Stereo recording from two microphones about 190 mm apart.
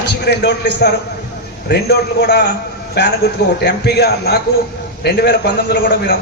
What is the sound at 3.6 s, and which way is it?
A man's voice, 60° left (ahead or behind).